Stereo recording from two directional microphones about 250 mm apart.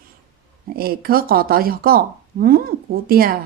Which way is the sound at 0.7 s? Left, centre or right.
Right.